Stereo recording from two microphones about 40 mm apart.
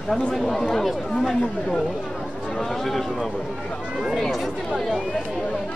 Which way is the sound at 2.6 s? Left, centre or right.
Centre.